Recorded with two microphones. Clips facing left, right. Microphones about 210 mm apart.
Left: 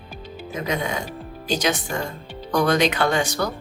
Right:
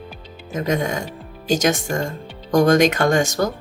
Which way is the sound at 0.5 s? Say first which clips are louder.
Right 4 dB; 45° right (ahead or behind).